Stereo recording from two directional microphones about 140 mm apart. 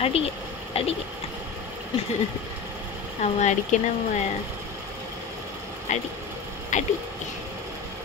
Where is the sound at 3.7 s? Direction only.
65° left (ahead or behind).